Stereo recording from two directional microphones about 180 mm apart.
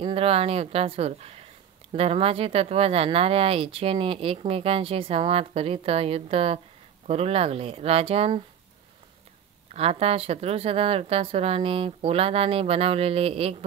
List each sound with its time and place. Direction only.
0.0 s speech: 30° right (ahead or behind)
9.8 s speech: 35° right (ahead or behind)